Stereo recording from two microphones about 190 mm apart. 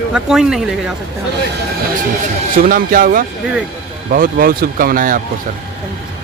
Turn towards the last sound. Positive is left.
turn(degrees=-45)  # may be behind; listen again after turning